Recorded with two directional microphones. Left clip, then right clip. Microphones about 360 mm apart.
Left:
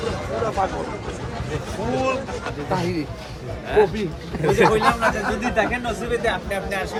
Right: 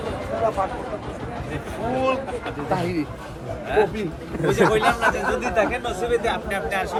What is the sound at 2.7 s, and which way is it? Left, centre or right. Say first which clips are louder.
Speech: even; centre.